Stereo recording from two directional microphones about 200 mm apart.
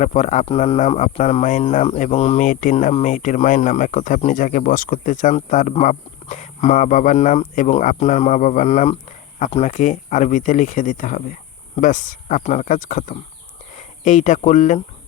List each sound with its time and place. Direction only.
0.0 s speech: 35° left (ahead or behind)